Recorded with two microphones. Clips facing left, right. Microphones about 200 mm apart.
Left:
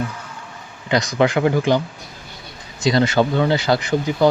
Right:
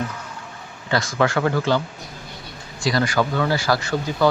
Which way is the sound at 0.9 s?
20° left (ahead or behind).